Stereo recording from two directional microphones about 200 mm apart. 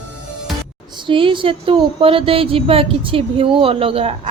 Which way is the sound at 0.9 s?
25° right (ahead or behind).